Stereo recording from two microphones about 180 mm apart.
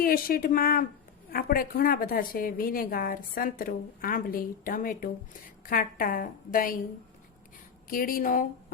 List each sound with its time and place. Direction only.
0.0 s a woman's voice: 55° left (ahead or behind)
7.9 s a woman's voice: 50° left (ahead or behind)